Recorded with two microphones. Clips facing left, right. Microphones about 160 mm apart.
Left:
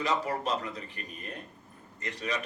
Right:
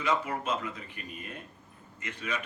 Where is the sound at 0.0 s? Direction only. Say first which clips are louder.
Even; 40° left (ahead or behind).